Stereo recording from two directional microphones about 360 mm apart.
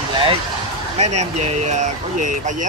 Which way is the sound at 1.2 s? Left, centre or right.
Centre.